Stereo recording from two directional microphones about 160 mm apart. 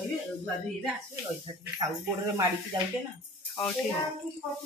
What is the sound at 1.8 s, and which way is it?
Speech, 20° right (ahead or behind).